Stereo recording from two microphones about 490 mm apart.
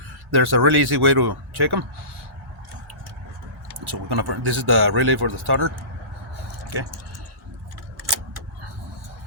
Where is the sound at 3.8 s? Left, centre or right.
Right.